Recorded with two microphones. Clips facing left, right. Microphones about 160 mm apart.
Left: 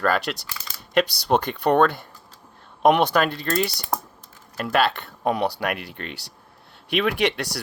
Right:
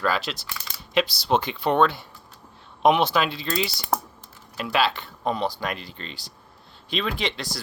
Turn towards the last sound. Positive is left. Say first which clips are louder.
# left 6 dB
turn(degrees=65)  # may be behind; listen again after turning